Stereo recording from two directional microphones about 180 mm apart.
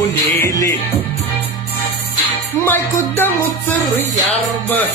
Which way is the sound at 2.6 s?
10° left (ahead or behind).